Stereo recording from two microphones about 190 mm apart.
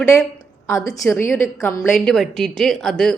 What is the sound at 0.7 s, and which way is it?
Speech, 20° left (ahead or behind).